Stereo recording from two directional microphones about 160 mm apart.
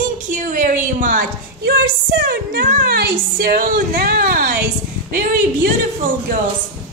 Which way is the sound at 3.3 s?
70° right (ahead or behind).